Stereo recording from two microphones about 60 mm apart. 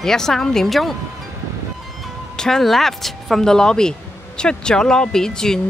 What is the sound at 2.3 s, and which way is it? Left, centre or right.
Speech, centre.